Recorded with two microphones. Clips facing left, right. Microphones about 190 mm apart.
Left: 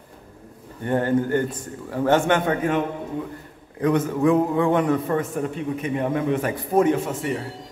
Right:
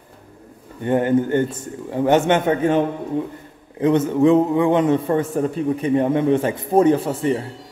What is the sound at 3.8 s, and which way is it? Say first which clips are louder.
A man's voice: right 4 dB; 25° right (ahead or behind).